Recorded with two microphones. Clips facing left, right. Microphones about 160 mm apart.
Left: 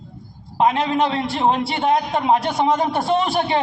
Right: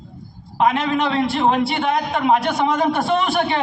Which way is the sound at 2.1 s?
60° right (ahead or behind).